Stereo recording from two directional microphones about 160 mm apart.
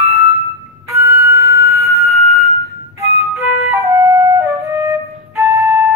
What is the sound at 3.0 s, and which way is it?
Music, 40° left (ahead or behind).